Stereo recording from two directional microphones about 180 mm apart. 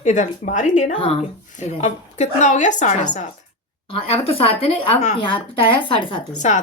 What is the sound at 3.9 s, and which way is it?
Speech, 30° left (ahead or behind).